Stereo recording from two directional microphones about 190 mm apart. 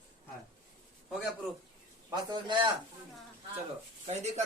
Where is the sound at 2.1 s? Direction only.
20° right (ahead or behind).